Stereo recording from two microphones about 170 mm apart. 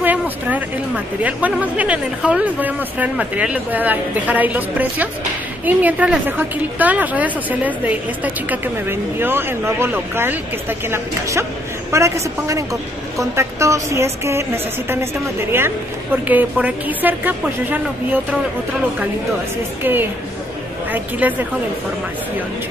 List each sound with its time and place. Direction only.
0.0 s a woman's voice: 10° right (ahead or behind)
16.3 s a woman's voice: 10° right (ahead or behind)
19.8 s a woman's voice: 10° right (ahead or behind)